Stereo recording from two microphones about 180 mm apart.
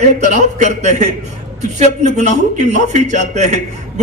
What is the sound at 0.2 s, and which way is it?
A man's voice, 40° right (ahead or behind).